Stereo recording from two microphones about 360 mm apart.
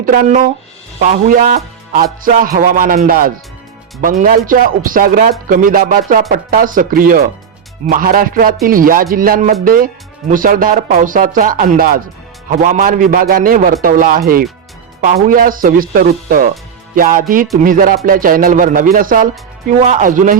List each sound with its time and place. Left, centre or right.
0.0 s speech: right